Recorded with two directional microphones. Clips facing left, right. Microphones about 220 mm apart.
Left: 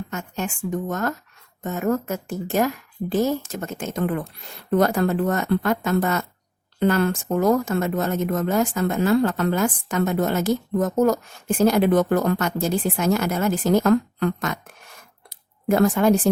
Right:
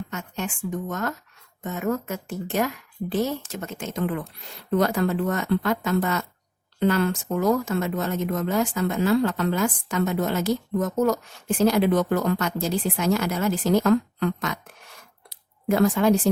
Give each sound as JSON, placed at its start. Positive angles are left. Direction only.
{"t": 0.1, "sound": "speech", "side_deg": 45}